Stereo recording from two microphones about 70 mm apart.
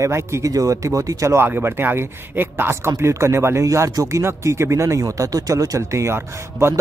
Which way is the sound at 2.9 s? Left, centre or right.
Right.